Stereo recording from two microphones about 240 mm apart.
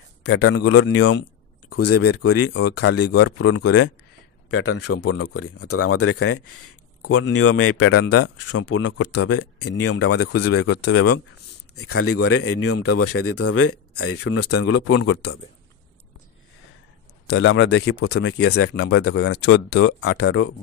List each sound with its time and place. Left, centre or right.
0.3 s speech: left
1.7 s speech: left
3.3 s speech: left
5.1 s speech: left
8.5 s speech: left
10.4 s speech: left
11.9 s speech: left
17.3 s speech: left
19.8 s speech: left